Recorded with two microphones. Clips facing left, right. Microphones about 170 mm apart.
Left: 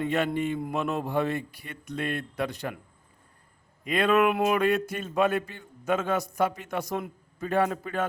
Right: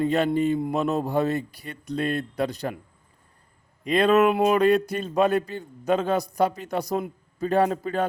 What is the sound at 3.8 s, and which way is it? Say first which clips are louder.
Speech: right 4 dB; 35° right (ahead or behind).